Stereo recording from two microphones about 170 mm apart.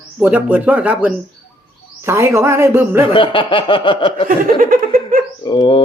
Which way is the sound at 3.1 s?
30° left (ahead or behind).